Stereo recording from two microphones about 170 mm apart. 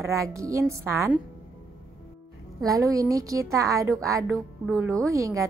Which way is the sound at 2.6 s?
20° right (ahead or behind).